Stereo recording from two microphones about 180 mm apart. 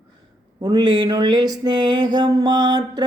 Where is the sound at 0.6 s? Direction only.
25° right (ahead or behind).